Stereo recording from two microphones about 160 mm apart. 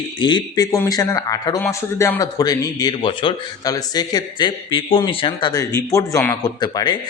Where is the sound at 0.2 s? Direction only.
30° left (ahead or behind).